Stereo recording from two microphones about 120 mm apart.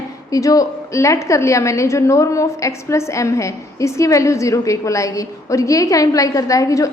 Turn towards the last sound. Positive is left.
turn(degrees=25)  # may be behind; listen again after turning